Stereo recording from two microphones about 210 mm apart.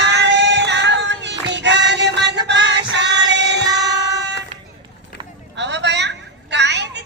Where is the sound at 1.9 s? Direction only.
55° right (ahead or behind).